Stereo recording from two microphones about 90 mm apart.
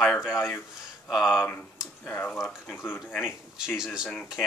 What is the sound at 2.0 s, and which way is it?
Speech, 15° left (ahead or behind).